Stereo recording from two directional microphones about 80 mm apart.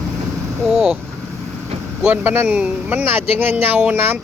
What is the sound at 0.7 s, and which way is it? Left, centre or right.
Vehicle, centre.